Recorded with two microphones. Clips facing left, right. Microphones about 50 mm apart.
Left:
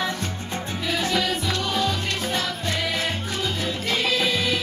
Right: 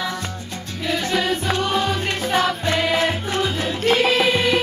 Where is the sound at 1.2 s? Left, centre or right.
Right.